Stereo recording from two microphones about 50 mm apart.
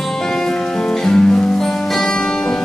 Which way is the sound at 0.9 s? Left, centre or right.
Centre.